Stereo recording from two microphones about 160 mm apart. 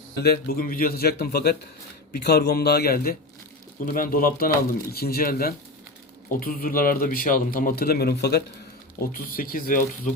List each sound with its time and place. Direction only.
0.2 s a man's voice: 75° left (ahead or behind)
9.0 s a man's voice: 65° left (ahead or behind)